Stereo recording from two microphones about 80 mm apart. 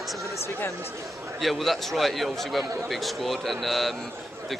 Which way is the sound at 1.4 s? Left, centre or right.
Centre.